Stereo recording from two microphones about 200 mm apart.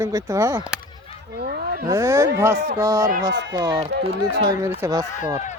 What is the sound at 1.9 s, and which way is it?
Speech, 15° right (ahead or behind).